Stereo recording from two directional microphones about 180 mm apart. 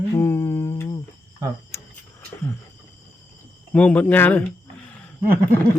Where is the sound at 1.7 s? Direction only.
15° left (ahead or behind).